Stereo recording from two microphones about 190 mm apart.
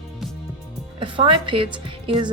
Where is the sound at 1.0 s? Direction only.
25° right (ahead or behind).